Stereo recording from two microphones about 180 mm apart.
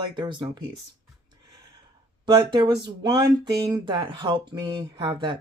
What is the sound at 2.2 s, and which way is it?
Speech, 25° right (ahead or behind).